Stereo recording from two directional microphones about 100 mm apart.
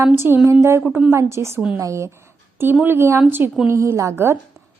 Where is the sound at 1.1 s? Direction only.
30° right (ahead or behind).